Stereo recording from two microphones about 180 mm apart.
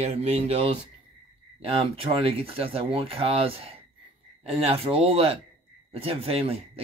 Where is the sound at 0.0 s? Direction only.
35° right (ahead or behind).